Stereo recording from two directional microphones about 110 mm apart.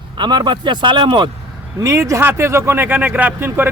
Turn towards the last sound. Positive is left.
turn(degrees=-20)  # may be behind; listen again after turning